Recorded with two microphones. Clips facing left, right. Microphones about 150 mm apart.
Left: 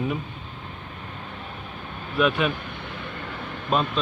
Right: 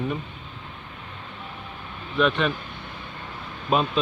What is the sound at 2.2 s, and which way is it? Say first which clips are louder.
Speech: even; 5° left (ahead or behind).